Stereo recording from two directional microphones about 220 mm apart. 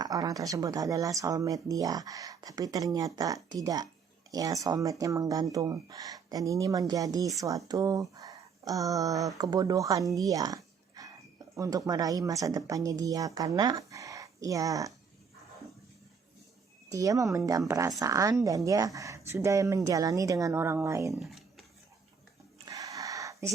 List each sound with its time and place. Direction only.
0.0 s speech: 15° right (ahead or behind)
16.9 s speech: 15° right (ahead or behind)
22.6 s a sound: 15° right (ahead or behind)